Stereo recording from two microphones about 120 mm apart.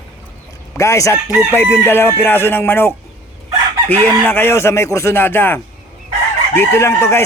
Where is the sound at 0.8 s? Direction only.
25° left (ahead or behind).